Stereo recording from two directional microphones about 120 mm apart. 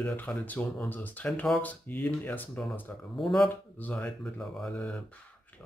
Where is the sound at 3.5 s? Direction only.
15° left (ahead or behind).